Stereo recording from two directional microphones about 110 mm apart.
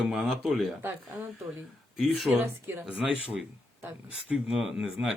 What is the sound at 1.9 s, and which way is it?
Speech, centre (ahead or behind).